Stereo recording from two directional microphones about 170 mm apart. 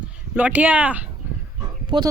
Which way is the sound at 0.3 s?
10° right (ahead or behind).